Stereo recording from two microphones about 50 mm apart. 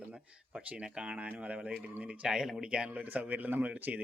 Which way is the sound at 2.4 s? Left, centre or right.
Centre.